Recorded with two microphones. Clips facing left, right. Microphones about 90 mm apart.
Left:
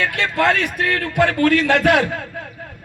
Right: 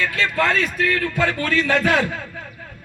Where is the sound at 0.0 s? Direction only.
65° left (ahead or behind).